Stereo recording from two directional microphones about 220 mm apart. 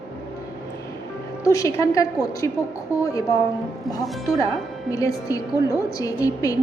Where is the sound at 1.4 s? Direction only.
15° left (ahead or behind).